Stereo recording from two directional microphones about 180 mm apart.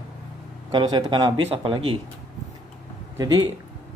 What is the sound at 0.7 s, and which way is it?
Speech, 25° right (ahead or behind).